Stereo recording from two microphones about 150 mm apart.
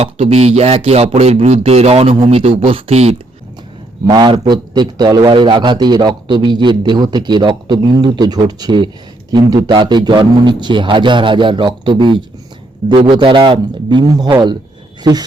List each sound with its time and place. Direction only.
0.0 s speech: 45° right (ahead or behind)
4.0 s a man's voice: 30° right (ahead or behind)